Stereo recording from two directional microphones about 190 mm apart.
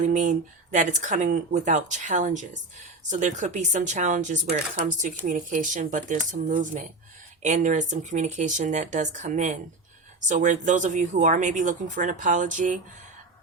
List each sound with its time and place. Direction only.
0.0 s speech: 40° right (ahead or behind)